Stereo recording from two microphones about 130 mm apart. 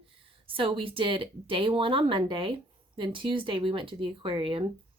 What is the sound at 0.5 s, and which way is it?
Speech, 40° right (ahead or behind).